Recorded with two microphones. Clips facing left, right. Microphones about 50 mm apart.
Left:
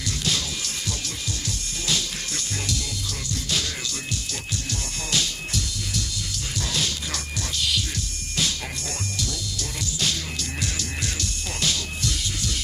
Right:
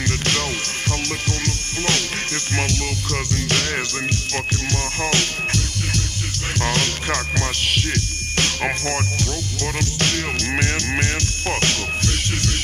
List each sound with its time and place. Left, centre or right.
1.4 s music: right
5.1 s music: right
9.9 s music: right